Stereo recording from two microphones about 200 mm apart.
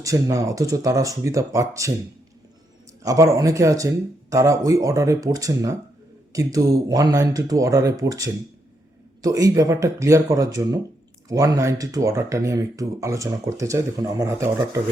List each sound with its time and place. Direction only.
0.0 s speech: 15° right (ahead or behind)
3.0 s speech: 15° right (ahead or behind)